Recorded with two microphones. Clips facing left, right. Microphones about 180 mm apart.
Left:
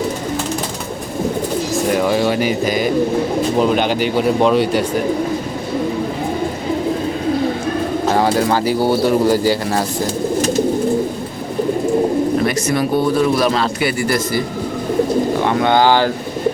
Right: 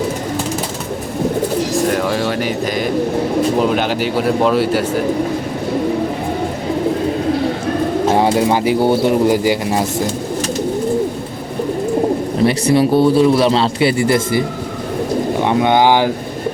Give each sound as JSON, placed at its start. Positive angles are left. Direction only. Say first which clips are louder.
{"t": 1.7, "sound": "speech", "louder": "even", "side_deg": 5}
{"t": 8.1, "sound": "speech", "louder": "even", "side_deg": -20}
{"t": 12.5, "sound": "speech", "louder": "right 4 dB", "side_deg": -30}
{"t": 15.4, "sound": "speech", "louder": "right 3 dB", "side_deg": -15}